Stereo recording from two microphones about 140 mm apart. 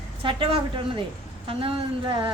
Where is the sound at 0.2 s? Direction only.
40° right (ahead or behind).